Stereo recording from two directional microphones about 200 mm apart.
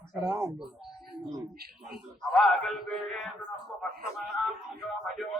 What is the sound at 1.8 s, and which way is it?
Speech, centre (ahead or behind).